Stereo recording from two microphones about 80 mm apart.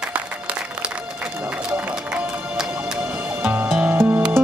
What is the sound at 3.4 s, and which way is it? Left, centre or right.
Music, right.